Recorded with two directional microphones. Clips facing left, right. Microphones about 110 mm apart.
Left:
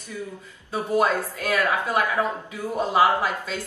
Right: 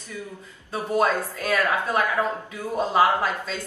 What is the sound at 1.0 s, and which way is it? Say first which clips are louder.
A woman's voice: even; 15° left (ahead or behind).